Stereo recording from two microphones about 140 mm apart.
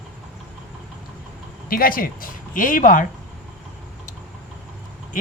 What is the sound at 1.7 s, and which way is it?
Speech, 90° left.